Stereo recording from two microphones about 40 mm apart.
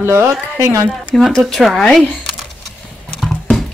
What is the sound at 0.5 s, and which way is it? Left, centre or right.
Speech, right.